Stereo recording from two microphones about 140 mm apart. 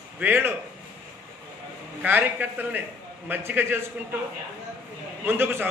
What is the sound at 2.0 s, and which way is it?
A man's voice, 15° right (ahead or behind).